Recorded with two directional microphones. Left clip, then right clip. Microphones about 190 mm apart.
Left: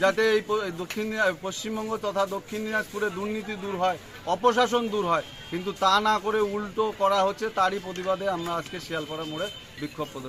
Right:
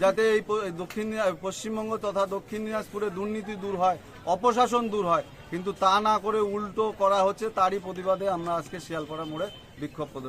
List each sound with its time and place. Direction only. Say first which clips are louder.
0.0 s speech: even; 20° right (ahead or behind)